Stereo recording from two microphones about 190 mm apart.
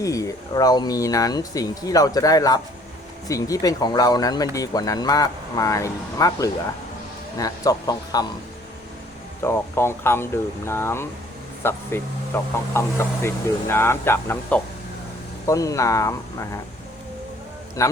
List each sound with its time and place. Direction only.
0.0 s speech: 15° left (ahead or behind)
9.4 s speech: 15° left (ahead or behind)
17.8 s speech: 15° left (ahead or behind)